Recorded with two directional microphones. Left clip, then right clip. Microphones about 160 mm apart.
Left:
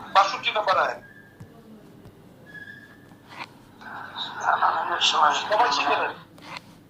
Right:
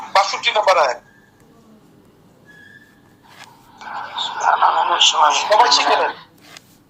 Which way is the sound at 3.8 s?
35° right (ahead or behind).